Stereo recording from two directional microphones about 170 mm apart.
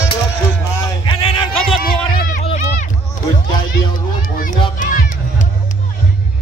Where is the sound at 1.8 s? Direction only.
60° left (ahead or behind).